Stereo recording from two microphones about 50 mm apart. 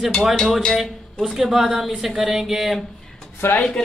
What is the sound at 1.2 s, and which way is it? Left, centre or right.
Speech, centre.